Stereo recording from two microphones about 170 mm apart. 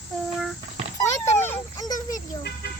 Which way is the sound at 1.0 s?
15° left (ahead or behind).